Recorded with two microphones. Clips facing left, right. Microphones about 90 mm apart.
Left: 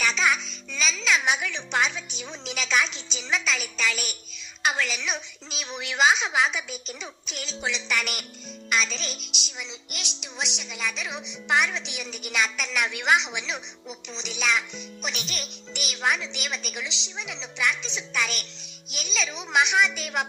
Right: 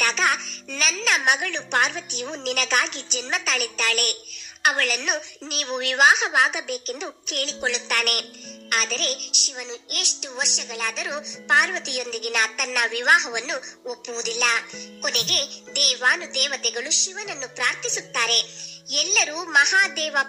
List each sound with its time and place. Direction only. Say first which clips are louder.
0.0 s a child's voice: right 1 dB; 60° right (ahead or behind)